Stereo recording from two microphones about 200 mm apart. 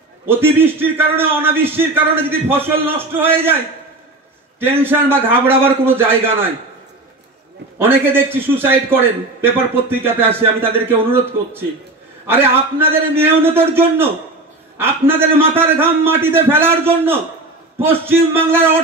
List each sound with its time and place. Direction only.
0.3 s a man's voice: 10° right (ahead or behind)
4.6 s a man's voice: 10° right (ahead or behind)
7.8 s a man's voice: 10° right (ahead or behind)